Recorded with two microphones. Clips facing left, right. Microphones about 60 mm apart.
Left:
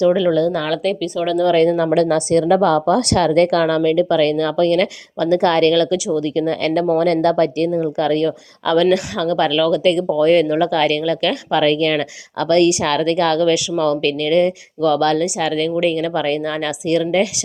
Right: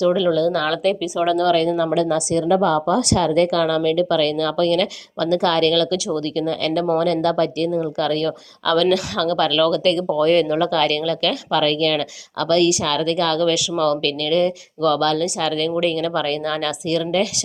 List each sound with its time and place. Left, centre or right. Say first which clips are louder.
0.0 s speech: left 2 dB; left
0.5 s speech: even; centre
0.9 s speech: even; centre
1.5 s speech: left 4 dB; left
15.2 s speech: left 2 dB; centre